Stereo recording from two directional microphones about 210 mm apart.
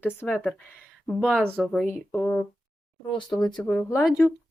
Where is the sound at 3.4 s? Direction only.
20° left (ahead or behind).